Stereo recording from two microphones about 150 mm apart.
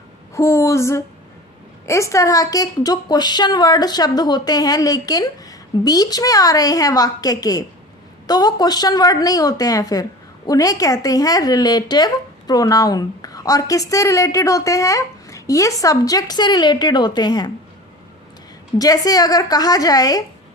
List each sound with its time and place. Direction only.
0.3 s a woman's voice: 20° left (ahead or behind)
18.8 s a woman's voice: 25° left (ahead or behind)